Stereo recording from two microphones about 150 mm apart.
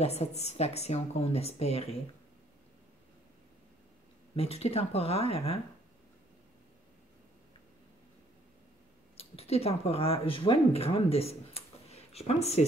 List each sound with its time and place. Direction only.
0.0 s speech: 45° left (ahead or behind)
4.4 s speech: 40° left (ahead or behind)
9.1 s a woman's voice: 40° left (ahead or behind)